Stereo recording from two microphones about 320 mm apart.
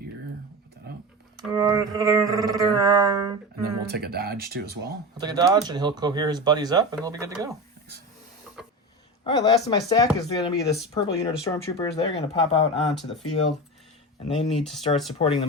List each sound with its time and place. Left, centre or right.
1.5 s speech: centre
3.6 s speech: right
5.1 s speech: centre
8.5 s printer: centre
9.2 s speech: centre
12.9 s speech: centre
14.3 s speech: centre